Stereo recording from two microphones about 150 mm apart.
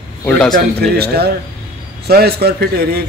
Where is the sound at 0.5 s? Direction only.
90° right.